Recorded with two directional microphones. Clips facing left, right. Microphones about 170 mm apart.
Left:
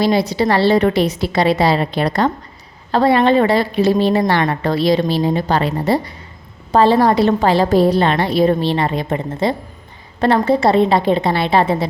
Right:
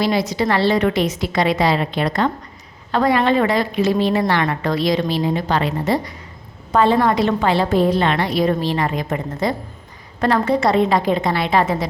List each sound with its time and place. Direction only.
0.0 s a woman's voice: 30° left (ahead or behind)